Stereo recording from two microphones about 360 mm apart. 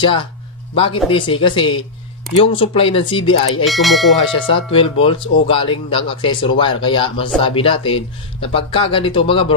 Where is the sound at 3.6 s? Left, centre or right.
Centre.